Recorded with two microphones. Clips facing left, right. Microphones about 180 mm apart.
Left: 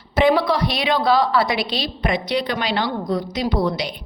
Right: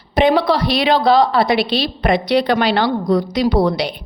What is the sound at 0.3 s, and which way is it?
Speech, 75° right (ahead or behind).